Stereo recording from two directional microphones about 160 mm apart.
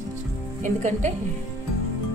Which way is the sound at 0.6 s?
50° right (ahead or behind).